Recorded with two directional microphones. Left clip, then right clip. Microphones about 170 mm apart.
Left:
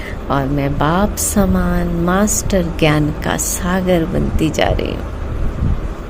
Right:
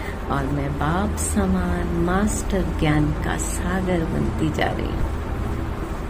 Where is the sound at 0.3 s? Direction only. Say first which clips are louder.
Left 8 dB; 55° left (ahead or behind).